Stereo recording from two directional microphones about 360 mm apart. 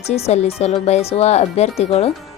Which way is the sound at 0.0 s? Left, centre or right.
Centre.